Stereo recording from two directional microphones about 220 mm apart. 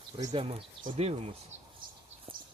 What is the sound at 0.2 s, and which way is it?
Speech, 25° right (ahead or behind).